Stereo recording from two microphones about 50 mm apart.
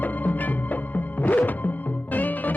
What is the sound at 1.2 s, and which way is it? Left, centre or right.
Music, left.